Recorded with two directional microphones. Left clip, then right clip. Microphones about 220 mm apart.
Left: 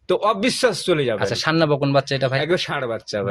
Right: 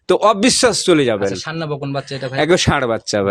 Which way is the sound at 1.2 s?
30° left (ahead or behind).